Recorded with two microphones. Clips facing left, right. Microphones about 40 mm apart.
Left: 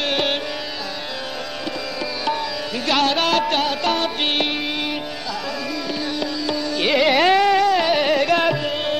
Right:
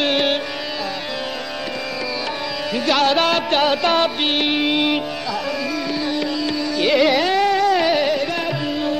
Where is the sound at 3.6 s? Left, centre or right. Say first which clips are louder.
Right 4 dB; right.